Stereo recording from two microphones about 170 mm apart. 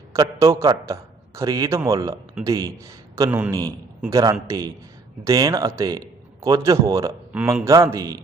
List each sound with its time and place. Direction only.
0.1 s a sound: 15° right (ahead or behind)
0.5 s a man's voice: 20° right (ahead or behind)
3.2 s a man's voice: 10° right (ahead or behind)
4.1 s a man's voice: 20° right (ahead or behind)